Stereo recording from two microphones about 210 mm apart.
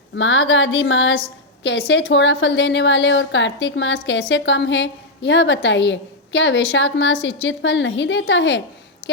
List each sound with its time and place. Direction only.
0.2 s a woman's voice: 60° left (ahead or behind)